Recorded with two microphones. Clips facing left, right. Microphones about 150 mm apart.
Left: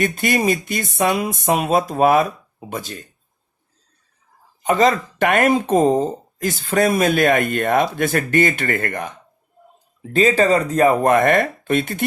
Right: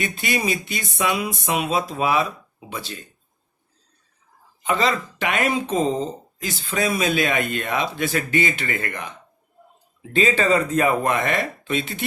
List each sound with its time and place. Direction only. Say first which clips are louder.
0.0 s speech: left 6 dB; 50° left (ahead or behind)
4.6 s speech: left 6 dB; 45° left (ahead or behind)